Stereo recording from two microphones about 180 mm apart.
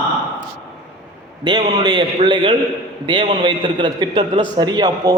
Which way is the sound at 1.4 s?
25° right (ahead or behind).